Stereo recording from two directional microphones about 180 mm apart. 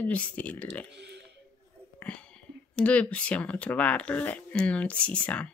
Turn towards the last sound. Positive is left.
turn(degrees=5)  # may be behind; listen again after turning